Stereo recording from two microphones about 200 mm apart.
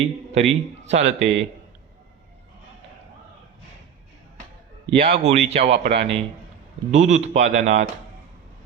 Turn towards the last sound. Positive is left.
turn(degrees=-35)  # may be behind; listen again after turning